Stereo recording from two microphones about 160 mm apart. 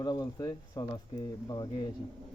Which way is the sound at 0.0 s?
25° left (ahead or behind).